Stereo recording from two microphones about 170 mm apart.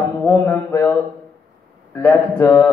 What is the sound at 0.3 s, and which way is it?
Speech, 10° left (ahead or behind).